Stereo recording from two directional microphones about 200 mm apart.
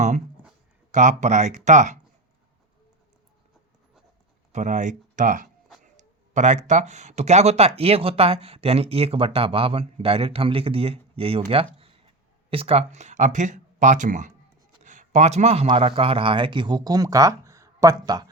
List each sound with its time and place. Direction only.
0.9 s speech: 35° right (ahead or behind)
4.5 s a man's voice: 35° right (ahead or behind); by 18.3 s 20° right (ahead or behind)